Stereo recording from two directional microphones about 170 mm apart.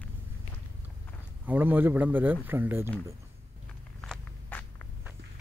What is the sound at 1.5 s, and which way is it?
Speech, 10° right (ahead or behind).